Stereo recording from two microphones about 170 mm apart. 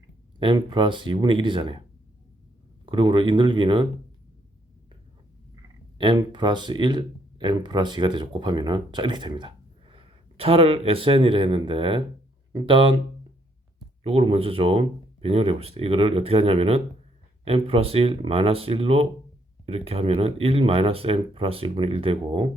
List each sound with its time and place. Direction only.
0.3 s speech: 30° right (ahead or behind)
2.8 s speech: 30° right (ahead or behind)
6.0 s speech: 25° right (ahead or behind)
14.0 s speech: 35° right (ahead or behind)